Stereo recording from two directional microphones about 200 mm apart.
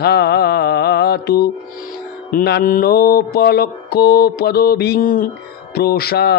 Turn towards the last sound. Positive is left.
turn(degrees=50)  # may be behind; listen again after turning